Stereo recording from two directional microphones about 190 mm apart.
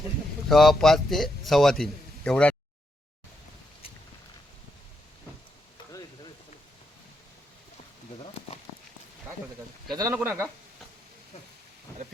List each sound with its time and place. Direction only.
0.4 s a man's voice: centre (ahead or behind)
9.9 s speech: 20° right (ahead or behind)
10.2 s speech: 10° right (ahead or behind)